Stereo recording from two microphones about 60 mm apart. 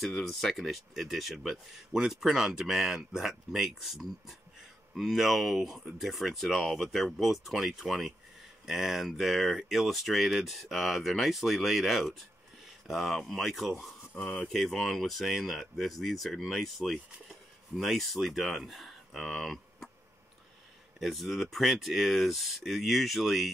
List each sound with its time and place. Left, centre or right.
0.0 s speech: centre
14.1 s speech: centre
14.5 s speech: centre
21.0 s speech: centre